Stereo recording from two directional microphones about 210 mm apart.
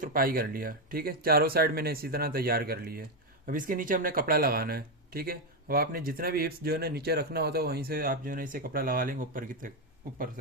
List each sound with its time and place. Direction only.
0.0 s speech: 45° right (ahead or behind)